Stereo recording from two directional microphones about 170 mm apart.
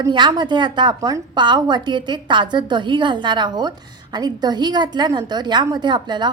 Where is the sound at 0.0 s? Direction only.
25° right (ahead or behind).